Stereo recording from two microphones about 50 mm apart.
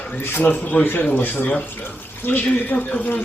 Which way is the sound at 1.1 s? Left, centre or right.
Left.